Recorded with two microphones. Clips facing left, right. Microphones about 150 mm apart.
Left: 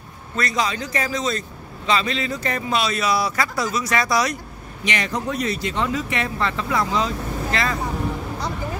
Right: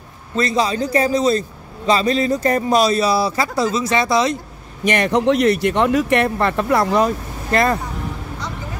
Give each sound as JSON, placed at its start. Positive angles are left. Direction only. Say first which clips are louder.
{"t": 0.4, "sound": "a man's voice", "louder": "right 6 dB", "side_deg": -30}
{"t": 4.8, "sound": "speech", "louder": "right 9 dB", "side_deg": -55}